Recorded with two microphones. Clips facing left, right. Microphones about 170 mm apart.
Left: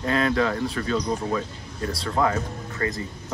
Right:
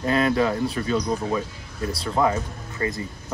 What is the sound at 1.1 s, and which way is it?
Speech, 10° right (ahead or behind).